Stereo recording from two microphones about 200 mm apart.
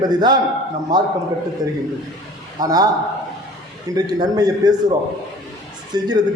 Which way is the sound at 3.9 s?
20° right (ahead or behind).